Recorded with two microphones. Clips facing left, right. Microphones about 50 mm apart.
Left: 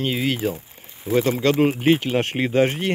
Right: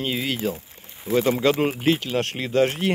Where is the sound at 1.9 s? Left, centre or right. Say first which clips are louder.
Left 4 dB; centre.